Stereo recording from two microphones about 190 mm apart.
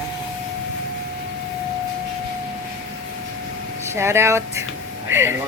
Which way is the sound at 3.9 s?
15° right (ahead or behind).